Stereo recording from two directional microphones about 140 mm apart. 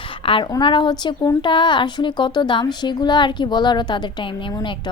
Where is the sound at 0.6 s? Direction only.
35° left (ahead or behind).